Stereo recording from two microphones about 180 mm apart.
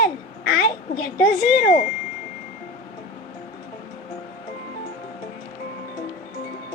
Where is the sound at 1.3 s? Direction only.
55° left (ahead or behind).